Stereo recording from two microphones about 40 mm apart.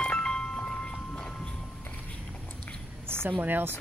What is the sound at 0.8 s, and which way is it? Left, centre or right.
Train, left.